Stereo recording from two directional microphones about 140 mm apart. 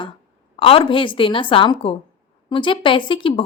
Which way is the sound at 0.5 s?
40° left (ahead or behind).